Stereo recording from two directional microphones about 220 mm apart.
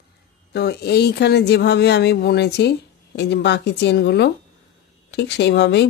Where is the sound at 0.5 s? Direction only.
50° left (ahead or behind).